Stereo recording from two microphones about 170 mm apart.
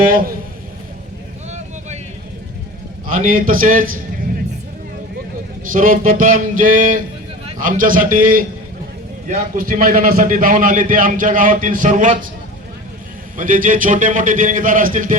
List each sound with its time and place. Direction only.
0.0 s a man's voice: 55° right (ahead or behind)
1.5 s vehicle: 40° right (ahead or behind)
3.1 s a man's voice: 55° right (ahead or behind)
5.7 s a man's voice: 55° right (ahead or behind)
13.3 s a man's voice: 50° right (ahead or behind)